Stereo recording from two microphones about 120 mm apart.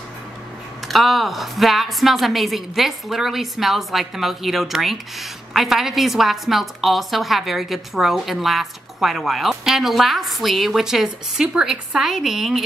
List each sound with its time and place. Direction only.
0.8 s a woman's voice: centre (ahead or behind)